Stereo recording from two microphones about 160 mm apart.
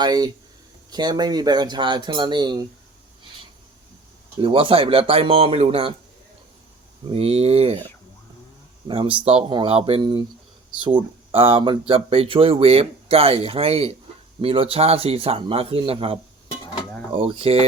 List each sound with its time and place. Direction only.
0.0 s speech: 25° right (ahead or behind)
4.4 s speech: 35° right (ahead or behind)
7.1 s speech: 40° right (ahead or behind)
8.9 s speech: 35° right (ahead or behind)